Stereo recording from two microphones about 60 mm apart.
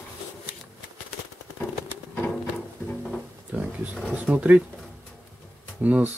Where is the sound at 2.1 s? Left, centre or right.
Left.